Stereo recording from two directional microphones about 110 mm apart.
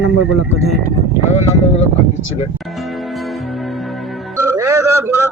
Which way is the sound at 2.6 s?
Centre (ahead or behind).